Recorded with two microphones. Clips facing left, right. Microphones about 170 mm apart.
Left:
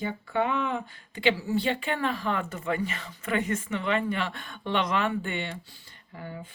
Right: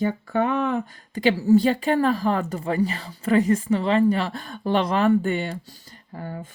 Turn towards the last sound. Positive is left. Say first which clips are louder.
# right 5 dB
turn(degrees=-45)  # may be behind; listen again after turning